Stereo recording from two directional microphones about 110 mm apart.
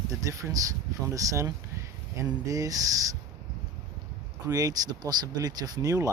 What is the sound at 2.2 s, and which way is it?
Speech, 30° right (ahead or behind).